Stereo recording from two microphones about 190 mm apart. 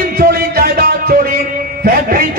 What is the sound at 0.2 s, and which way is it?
Music, 50° right (ahead or behind).